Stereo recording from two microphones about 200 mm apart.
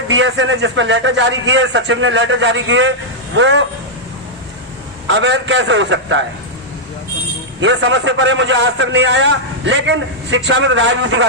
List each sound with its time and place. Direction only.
0.1 s a man's voice: 65° right (ahead or behind)
5.0 s a man's voice: 65° right (ahead or behind)
7.6 s a man's voice: 65° right (ahead or behind)